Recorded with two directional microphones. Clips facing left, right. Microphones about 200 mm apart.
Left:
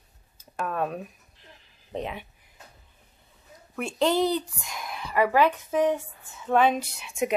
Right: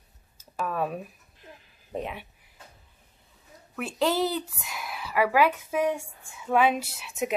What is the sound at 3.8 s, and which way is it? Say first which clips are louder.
Speech: left 2 dB; 5° right (ahead or behind).